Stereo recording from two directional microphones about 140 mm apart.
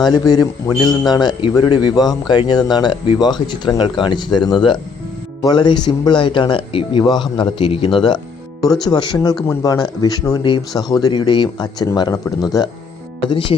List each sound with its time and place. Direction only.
0.0 s a man's voice: 30° left (ahead or behind)